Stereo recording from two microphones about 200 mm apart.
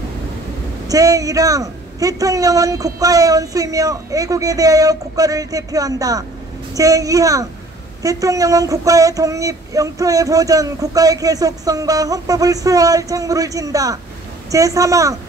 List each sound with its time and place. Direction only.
0.8 s child singing: 15° right (ahead or behind)